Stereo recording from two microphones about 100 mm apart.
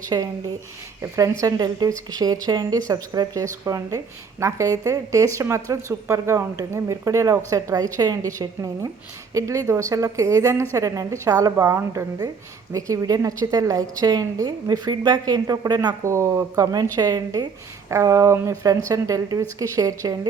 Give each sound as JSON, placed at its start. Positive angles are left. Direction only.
{"t": 0.1, "sound": "speech", "side_deg": -40}
{"t": 16.0, "sound": "speech", "side_deg": -30}
{"t": 16.9, "sound": "speech", "side_deg": -40}